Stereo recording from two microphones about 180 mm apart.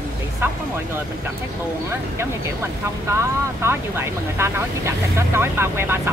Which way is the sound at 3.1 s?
15° right (ahead or behind).